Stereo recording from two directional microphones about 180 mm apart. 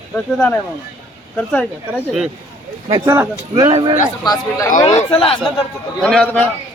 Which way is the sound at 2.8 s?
20° right (ahead or behind).